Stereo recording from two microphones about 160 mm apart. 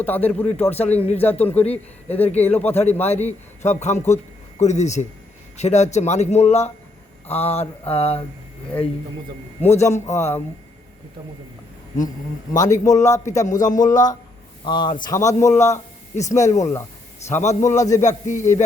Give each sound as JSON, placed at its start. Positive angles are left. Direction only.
{"t": 0.0, "sound": "speech", "side_deg": 10}
{"t": 3.1, "sound": "a man's voice", "side_deg": 45}
{"t": 7.3, "sound": "a sound", "side_deg": 40}
{"t": 9.6, "sound": "a man's voice", "side_deg": 45}
{"t": 10.1, "sound": "speech", "side_deg": 15}
{"t": 12.0, "sound": "a man's voice", "side_deg": 25}
{"t": 13.2, "sound": "a man's voice", "side_deg": 50}
{"t": 13.9, "sound": "a man's voice", "side_deg": 25}
{"t": 17.2, "sound": "a man's voice", "side_deg": 45}